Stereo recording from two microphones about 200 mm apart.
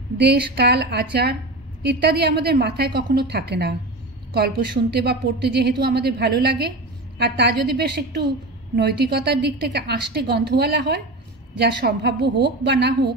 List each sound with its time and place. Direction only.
0.2 s a woman's voice: 55° right (ahead or behind)
4.9 s a woman's voice: 55° right (ahead or behind)